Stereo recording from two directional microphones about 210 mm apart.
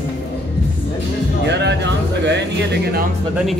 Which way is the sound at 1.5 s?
55° right (ahead or behind).